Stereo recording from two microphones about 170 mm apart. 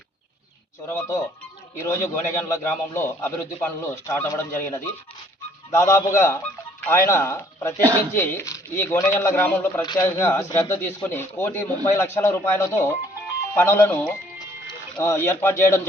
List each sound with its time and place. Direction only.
0.9 s speech: 15° left (ahead or behind)